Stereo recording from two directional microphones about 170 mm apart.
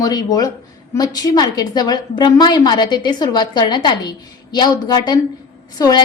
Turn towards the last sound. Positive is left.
turn(degrees=25)  # may be behind; listen again after turning